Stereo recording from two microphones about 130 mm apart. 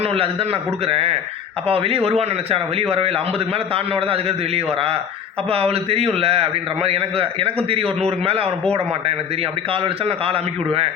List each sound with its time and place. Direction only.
0.0 s a man's voice: 50° right (ahead or behind)